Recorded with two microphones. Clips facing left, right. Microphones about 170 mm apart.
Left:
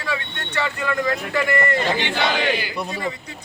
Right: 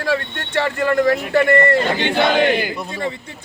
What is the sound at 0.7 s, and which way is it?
A man's voice, 55° right (ahead or behind).